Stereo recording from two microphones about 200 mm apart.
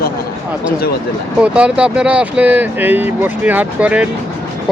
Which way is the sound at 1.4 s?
5° right (ahead or behind).